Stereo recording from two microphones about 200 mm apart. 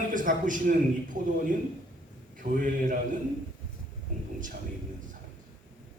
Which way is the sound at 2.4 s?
40° right (ahead or behind).